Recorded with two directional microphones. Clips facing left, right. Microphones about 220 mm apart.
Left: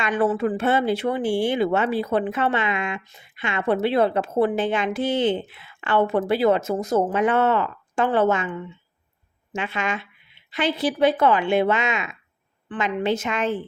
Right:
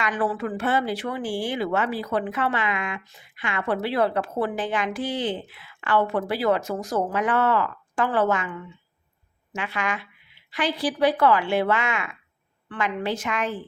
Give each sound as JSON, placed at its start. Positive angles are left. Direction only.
{"t": 0.0, "sound": "speech", "side_deg": 25}